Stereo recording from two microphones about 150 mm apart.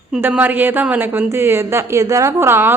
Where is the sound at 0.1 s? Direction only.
10° right (ahead or behind).